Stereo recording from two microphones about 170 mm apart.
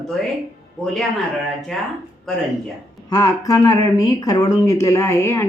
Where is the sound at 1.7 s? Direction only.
Centre (ahead or behind).